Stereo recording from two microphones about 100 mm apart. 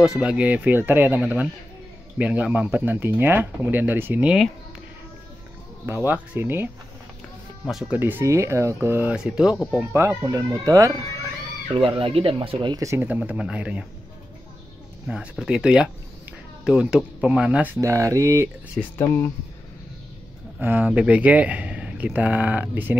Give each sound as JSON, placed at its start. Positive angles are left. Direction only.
{"t": 0.0, "sound": "speech", "side_deg": -10}
{"t": 5.9, "sound": "speech", "side_deg": -20}
{"t": 7.9, "sound": "speech", "side_deg": -20}
{"t": 9.1, "sound": "speech", "side_deg": -10}
{"t": 9.8, "sound": "speech", "side_deg": -25}
{"t": 11.7, "sound": "speech", "side_deg": -65}
{"t": 12.7, "sound": "speech", "side_deg": -30}
{"t": 13.0, "sound": "speech", "side_deg": -15}
{"t": 15.0, "sound": "speech", "side_deg": -10}
{"t": 17.7, "sound": "speech", "side_deg": -35}
{"t": 18.9, "sound": "speech", "side_deg": 25}
{"t": 20.5, "sound": "speech", "side_deg": -15}